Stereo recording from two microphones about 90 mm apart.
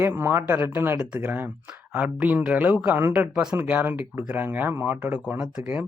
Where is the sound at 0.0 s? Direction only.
25° right (ahead or behind).